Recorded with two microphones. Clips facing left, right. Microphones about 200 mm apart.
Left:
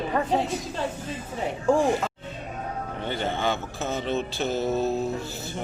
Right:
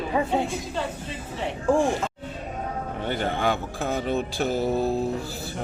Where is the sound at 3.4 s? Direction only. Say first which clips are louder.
Right 2 dB; 15° right (ahead or behind).